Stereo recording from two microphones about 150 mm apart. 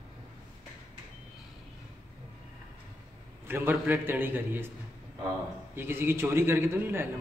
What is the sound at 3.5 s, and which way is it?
A man's voice, 15° right (ahead or behind).